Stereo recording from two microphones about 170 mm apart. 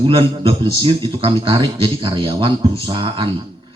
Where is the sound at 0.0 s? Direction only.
30° right (ahead or behind).